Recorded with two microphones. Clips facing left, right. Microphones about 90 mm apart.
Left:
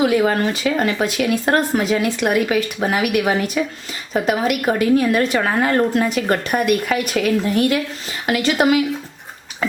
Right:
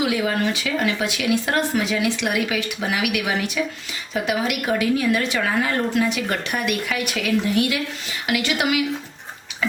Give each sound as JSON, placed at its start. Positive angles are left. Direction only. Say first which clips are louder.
{"t": 0.0, "sound": "speech", "louder": "left 5 dB", "side_deg": 45}